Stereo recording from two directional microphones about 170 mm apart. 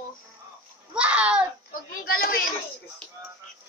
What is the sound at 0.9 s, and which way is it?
Speech, 5° right (ahead or behind).